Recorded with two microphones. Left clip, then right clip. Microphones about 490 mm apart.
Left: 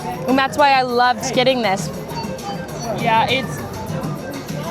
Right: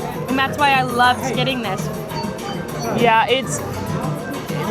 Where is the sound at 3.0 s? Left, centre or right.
Right.